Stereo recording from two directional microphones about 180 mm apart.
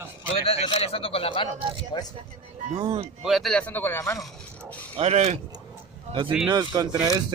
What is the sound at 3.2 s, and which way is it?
Speech, centre (ahead or behind).